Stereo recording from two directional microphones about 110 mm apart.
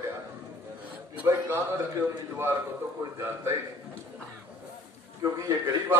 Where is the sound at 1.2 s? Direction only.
20° right (ahead or behind).